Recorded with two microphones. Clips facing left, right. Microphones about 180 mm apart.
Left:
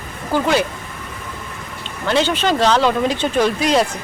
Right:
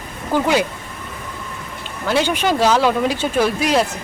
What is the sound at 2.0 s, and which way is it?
Speech, 10° right (ahead or behind).